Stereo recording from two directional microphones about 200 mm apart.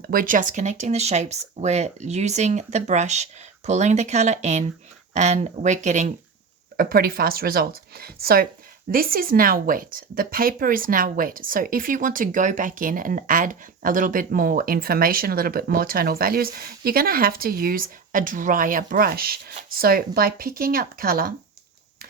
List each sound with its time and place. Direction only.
0.1 s a woman's voice: 45° right (ahead or behind)